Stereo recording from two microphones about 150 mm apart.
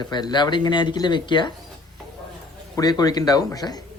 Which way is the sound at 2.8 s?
25° left (ahead or behind).